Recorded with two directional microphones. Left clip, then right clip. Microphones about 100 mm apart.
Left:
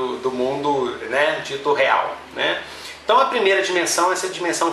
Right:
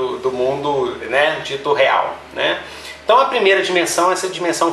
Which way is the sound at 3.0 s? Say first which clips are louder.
Right 3 dB; centre (ahead or behind).